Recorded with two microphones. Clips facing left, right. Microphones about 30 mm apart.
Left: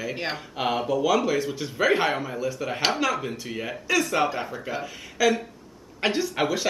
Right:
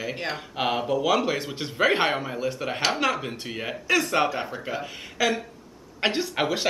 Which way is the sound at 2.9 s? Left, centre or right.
Right.